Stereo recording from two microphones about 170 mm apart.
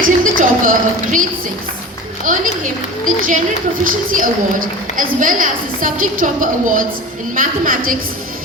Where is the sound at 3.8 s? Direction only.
55° right (ahead or behind).